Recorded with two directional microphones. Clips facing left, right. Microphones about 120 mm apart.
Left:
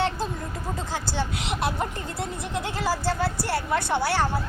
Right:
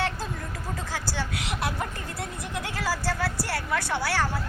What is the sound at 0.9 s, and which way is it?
Speech, 20° left (ahead or behind).